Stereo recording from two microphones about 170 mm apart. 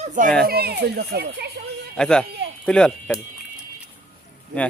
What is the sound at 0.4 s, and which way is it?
Speech, 65° right (ahead or behind).